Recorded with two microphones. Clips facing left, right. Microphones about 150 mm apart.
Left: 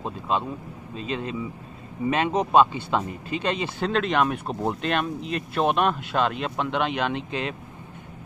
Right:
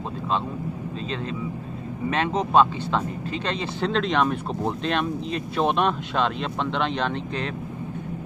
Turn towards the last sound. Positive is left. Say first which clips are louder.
# even
turn(degrees=10)  # may be behind; listen again after turning